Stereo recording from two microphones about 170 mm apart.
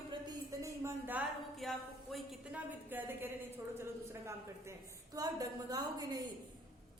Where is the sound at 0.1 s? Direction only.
20° right (ahead or behind).